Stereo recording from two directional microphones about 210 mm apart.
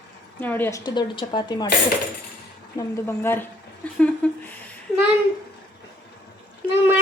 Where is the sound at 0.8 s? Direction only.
20° left (ahead or behind).